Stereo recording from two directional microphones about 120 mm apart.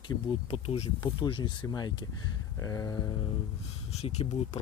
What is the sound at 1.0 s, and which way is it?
Speech, 35° left (ahead or behind).